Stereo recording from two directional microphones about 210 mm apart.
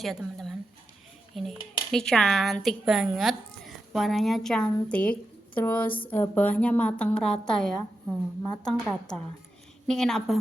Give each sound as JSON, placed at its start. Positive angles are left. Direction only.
{"t": 0.0, "sound": "speech", "side_deg": 0}